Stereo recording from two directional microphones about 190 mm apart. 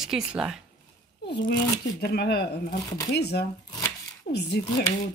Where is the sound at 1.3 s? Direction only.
65° left (ahead or behind).